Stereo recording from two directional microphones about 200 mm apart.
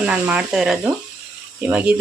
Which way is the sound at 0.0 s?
5° right (ahead or behind).